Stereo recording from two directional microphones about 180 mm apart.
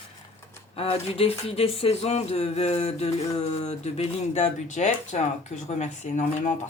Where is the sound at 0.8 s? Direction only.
35° left (ahead or behind).